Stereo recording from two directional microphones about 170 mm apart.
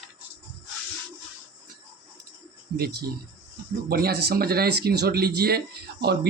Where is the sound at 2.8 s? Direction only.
70° right (ahead or behind).